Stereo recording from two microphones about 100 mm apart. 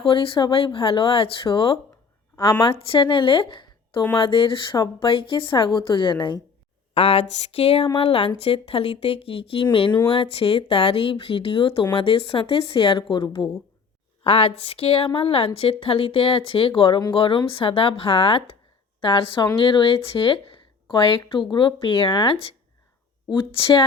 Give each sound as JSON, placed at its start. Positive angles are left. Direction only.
{"t": 0.0, "sound": "a woman's voice", "side_deg": 65}
{"t": 6.9, "sound": "a woman's voice", "side_deg": 80}
{"t": 9.6, "sound": "speech", "side_deg": 55}
{"t": 10.1, "sound": "speech", "side_deg": 65}
{"t": 14.3, "sound": "a woman's voice", "side_deg": 75}
{"t": 21.5, "sound": "speech", "side_deg": 50}
{"t": 23.3, "sound": "speech", "side_deg": 55}